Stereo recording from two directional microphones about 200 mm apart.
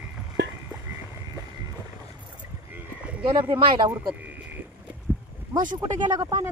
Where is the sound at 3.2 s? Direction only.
25° right (ahead or behind).